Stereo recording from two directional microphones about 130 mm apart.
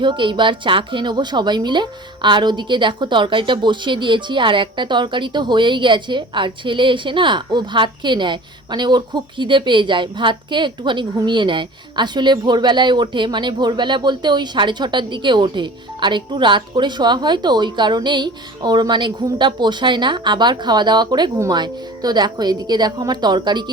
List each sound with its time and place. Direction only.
0.0 s a woman's voice: 40° right (ahead or behind)